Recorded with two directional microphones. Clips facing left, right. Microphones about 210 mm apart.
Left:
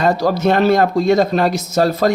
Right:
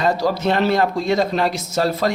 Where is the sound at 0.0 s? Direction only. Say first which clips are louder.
Left 4 dB; 45° left (ahead or behind).